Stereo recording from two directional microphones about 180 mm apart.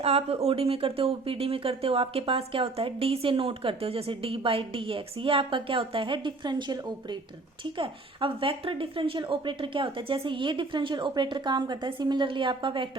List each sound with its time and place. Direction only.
0.0 s speech: 35° right (ahead or behind)